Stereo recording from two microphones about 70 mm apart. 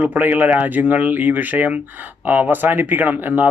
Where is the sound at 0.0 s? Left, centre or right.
Right.